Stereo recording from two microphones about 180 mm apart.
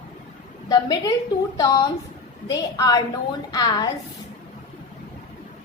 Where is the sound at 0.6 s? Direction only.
20° left (ahead or behind).